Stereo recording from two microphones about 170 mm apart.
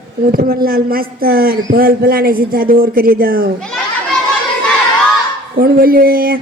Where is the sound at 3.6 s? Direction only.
5° left (ahead or behind).